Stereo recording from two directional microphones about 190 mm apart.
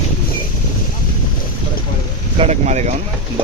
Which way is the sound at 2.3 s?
35° right (ahead or behind).